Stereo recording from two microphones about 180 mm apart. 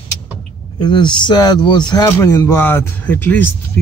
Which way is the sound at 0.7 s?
25° left (ahead or behind).